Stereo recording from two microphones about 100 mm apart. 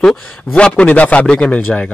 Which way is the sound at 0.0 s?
5° left (ahead or behind).